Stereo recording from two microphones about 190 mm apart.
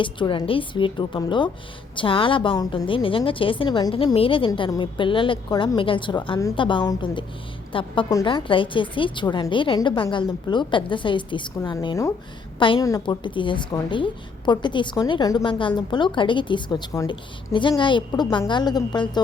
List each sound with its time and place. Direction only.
0.0 s a woman's voice: 25° left (ahead or behind)